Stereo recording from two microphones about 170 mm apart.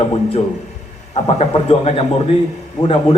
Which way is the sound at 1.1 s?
35° left (ahead or behind).